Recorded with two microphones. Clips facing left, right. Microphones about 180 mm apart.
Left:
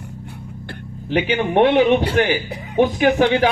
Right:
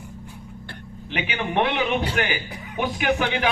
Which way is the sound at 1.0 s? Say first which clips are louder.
Left 9 dB; 35° left (ahead or behind).